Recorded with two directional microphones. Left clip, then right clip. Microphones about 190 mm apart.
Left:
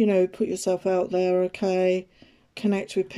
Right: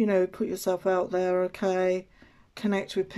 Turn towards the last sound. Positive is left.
turn(degrees=10)  # may be behind; listen again after turning